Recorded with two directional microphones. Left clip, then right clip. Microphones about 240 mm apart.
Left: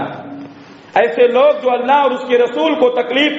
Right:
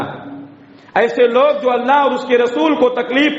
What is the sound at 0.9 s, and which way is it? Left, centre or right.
A man's voice, right.